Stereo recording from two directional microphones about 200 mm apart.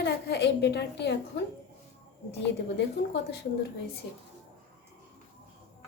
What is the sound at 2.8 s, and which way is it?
Speech, 60° left (ahead or behind).